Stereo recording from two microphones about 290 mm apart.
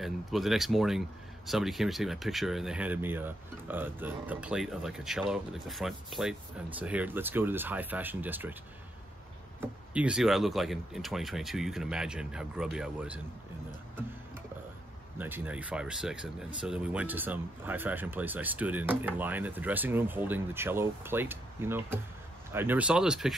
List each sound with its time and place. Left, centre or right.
0.0 s speech: centre
9.6 s speech: centre
15.1 s speech: centre